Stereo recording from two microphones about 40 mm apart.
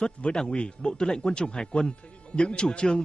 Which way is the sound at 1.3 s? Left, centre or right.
Left.